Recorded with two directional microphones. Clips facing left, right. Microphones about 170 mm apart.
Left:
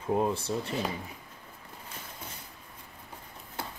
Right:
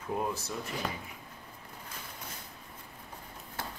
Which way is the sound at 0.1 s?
30° left (ahead or behind).